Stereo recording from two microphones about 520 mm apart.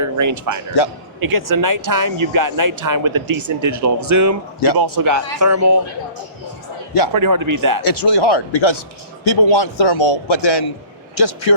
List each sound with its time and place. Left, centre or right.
0.0 s speech: right
7.1 s speech: right
7.8 s speech: left
8.1 s a man's voice: left
10.3 s a man's voice: left